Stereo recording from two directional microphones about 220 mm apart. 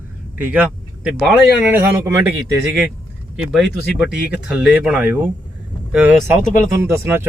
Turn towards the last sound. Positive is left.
turn(degrees=-10)  # may be behind; listen again after turning